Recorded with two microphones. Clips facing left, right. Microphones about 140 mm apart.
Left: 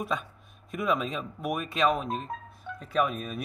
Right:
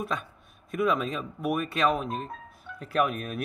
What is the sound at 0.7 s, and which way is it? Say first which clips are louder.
A man's voice: right 2 dB; centre (ahead or behind).